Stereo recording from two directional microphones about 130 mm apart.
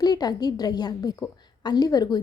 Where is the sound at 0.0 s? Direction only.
30° left (ahead or behind).